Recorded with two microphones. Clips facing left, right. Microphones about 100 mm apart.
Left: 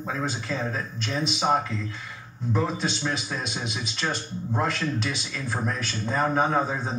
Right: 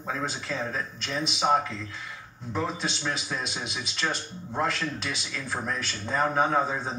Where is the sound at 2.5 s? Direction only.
Centre (ahead or behind).